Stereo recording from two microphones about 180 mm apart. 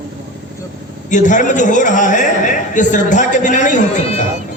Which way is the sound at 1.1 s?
45° left (ahead or behind).